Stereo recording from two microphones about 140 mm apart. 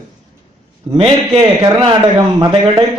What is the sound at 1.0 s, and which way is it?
A man's voice, 40° right (ahead or behind).